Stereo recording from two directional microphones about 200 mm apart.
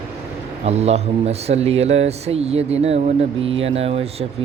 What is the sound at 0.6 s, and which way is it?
Speech, 30° right (ahead or behind).